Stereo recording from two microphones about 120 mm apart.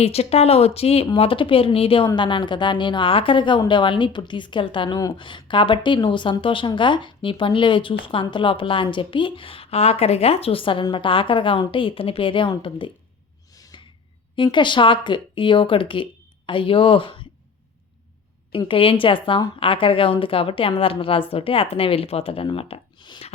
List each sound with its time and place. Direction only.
0.0 s a woman's voice: 55° left (ahead or behind)
13.5 s gasp: 30° left (ahead or behind)
14.3 s a woman's voice: 40° left (ahead or behind)
18.7 s a woman's voice: 45° left (ahead or behind)